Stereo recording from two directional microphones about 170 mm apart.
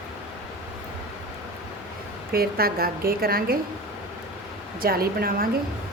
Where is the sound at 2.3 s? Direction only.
60° right (ahead or behind).